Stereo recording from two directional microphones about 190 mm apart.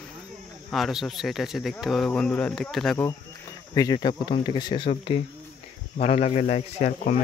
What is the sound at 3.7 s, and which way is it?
Speech, 20° left (ahead or behind).